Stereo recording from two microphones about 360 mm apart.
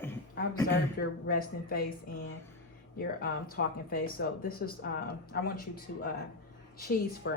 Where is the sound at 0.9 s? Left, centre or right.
Left.